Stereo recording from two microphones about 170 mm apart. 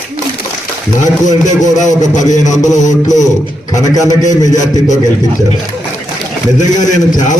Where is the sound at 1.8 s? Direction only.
45° left (ahead or behind).